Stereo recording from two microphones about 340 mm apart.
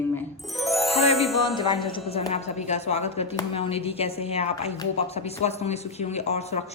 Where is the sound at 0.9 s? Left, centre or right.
Centre.